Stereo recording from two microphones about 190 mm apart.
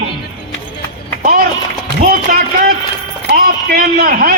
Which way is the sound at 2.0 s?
50° right (ahead or behind).